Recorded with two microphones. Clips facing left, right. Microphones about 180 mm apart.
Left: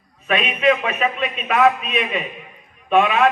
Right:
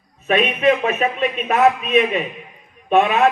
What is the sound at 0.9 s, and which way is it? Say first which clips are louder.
A man's voice: right 3 dB; 45° right (ahead or behind).